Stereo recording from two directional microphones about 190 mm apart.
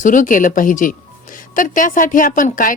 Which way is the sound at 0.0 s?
45° left (ahead or behind).